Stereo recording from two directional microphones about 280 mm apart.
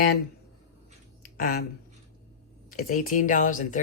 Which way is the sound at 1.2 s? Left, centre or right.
Left.